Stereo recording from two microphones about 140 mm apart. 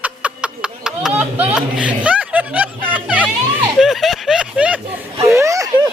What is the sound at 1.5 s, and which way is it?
Music, 10° right (ahead or behind).